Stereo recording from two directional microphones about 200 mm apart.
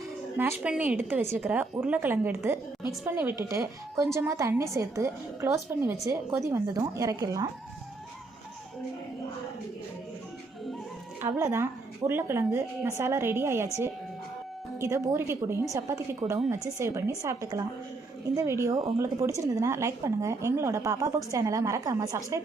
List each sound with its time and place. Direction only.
0.6 s a woman's voice: 5° right (ahead or behind)
11.2 s a woman's voice: 15° right (ahead or behind)
14.8 s a woman's voice: 15° right (ahead or behind)